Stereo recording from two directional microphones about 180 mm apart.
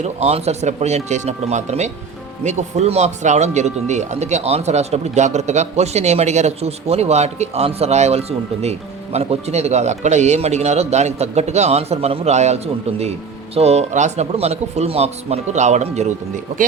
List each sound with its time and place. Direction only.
0.0 s speech: 35° right (ahead or behind)